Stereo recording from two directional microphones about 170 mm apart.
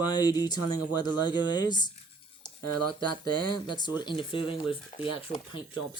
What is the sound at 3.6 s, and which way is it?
Speech, 25° left (ahead or behind).